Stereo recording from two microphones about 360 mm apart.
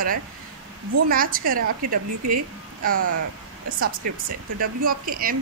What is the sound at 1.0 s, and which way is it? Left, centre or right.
A woman's voice, right.